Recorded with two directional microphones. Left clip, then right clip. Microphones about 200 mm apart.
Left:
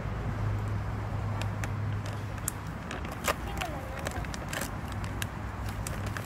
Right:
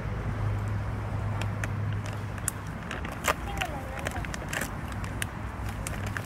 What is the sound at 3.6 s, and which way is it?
Vehicle, 25° left (ahead or behind).